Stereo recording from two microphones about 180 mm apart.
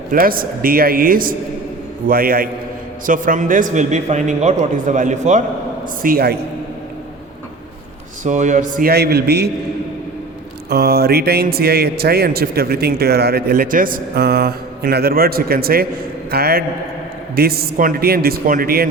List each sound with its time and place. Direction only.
0.1 s a man's voice: 55° right (ahead or behind)
6.0 s a man's voice: 55° right (ahead or behind)
8.2 s a man's voice: 40° right (ahead or behind); by 9.5 s 65° right (ahead or behind)
10.7 s a man's voice: 60° right (ahead or behind)